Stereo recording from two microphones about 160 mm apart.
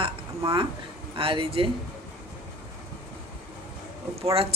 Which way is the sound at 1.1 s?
35° right (ahead or behind).